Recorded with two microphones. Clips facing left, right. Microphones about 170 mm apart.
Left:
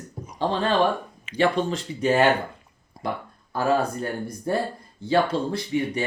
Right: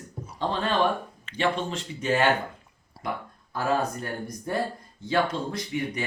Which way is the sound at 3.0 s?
15° left (ahead or behind).